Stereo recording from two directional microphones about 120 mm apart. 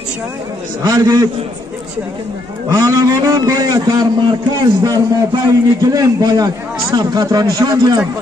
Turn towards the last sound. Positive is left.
turn(degrees=-35)  # may be behind; listen again after turning